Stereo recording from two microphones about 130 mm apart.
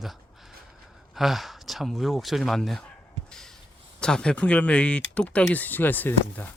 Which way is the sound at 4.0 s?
5° left (ahead or behind).